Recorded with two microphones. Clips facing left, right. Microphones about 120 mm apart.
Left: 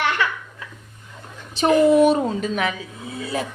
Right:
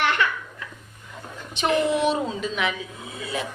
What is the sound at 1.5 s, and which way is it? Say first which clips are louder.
A woman's voice: left 7 dB; 35° left (ahead or behind).